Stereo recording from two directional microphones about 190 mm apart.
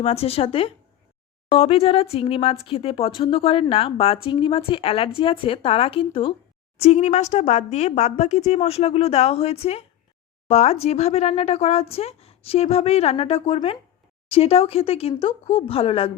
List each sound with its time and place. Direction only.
0.0 s speech: 30° left (ahead or behind)